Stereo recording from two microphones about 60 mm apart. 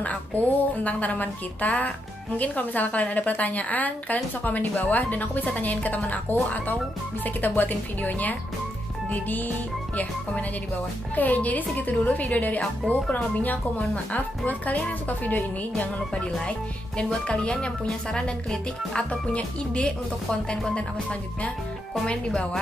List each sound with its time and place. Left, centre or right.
0.0 s a woman's voice: left
7.2 s a woman's voice: left
11.1 s a woman's voice: left
16.4 s speech: centre